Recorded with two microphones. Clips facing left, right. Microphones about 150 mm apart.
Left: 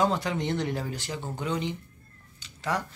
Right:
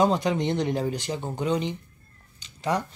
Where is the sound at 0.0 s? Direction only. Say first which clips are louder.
Right 4 dB; 20° right (ahead or behind).